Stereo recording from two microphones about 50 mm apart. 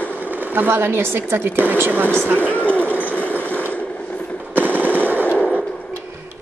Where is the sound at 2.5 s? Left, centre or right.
Left.